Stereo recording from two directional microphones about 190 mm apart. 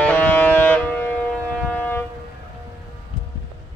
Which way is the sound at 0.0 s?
5° left (ahead or behind).